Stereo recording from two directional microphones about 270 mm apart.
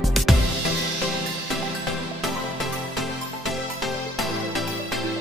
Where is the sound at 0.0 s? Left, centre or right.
Centre.